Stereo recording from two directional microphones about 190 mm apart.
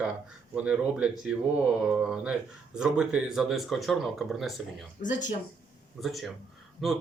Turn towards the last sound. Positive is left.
turn(degrees=0)  # may be behind; listen again after turning